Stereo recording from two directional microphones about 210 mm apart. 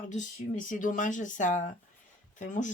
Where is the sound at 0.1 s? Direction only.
35° left (ahead or behind).